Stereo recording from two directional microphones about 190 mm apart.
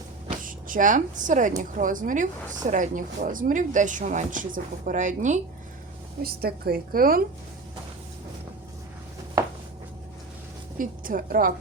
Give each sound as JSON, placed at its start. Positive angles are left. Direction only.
{"t": 0.4, "sound": "a woman's voice", "side_deg": -45}
{"t": 6.2, "sound": "speech", "side_deg": -55}
{"t": 10.8, "sound": "speech", "side_deg": -45}